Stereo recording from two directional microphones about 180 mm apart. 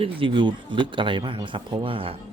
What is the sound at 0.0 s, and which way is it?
Speech, 30° right (ahead or behind).